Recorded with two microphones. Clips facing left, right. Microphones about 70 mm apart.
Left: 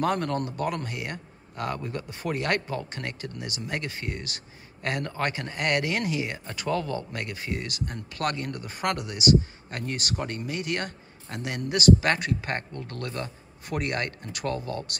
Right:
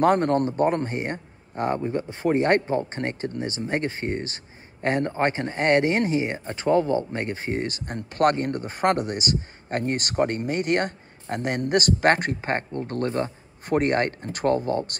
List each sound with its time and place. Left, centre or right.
0.0 s speech: right